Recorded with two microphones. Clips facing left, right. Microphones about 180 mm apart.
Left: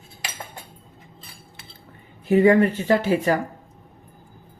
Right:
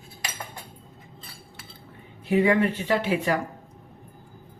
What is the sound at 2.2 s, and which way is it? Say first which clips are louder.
Speech: left 5 dB; 45° left (ahead or behind).